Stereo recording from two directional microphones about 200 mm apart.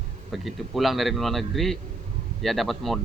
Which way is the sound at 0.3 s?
Centre (ahead or behind).